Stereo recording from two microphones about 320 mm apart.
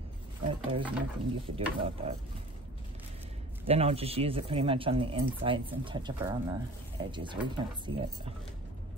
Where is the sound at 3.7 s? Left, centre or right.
Centre.